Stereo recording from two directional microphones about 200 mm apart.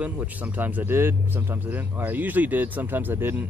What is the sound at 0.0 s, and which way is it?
Speech, 10° right (ahead or behind).